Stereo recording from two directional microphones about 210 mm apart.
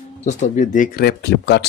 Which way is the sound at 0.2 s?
35° left (ahead or behind).